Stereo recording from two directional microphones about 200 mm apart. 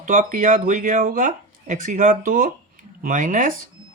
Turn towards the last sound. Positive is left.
turn(degrees=-40)  # may be behind; listen again after turning